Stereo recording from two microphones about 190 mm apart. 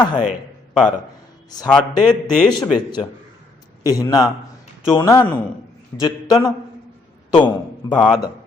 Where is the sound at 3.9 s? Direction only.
20° left (ahead or behind).